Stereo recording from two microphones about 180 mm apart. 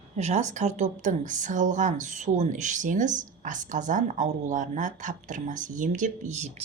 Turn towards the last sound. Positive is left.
turn(degrees=-40)  # may be behind; listen again after turning